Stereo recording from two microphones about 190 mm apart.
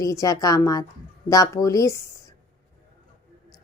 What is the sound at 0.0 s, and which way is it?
A woman's voice, 15° left (ahead or behind).